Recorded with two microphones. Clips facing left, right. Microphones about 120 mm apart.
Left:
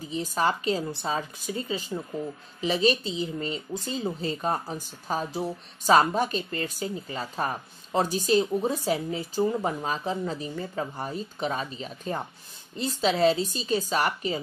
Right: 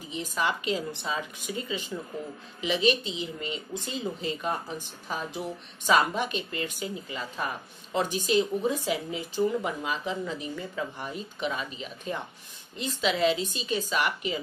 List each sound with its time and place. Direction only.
0.1 s a woman's voice: 35° left (ahead or behind)